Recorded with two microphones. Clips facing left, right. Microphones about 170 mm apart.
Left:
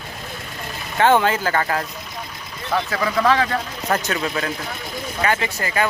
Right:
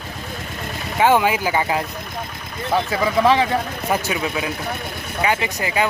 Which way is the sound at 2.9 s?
15° right (ahead or behind).